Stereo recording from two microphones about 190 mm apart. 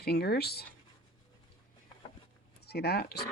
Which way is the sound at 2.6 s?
55° left (ahead or behind).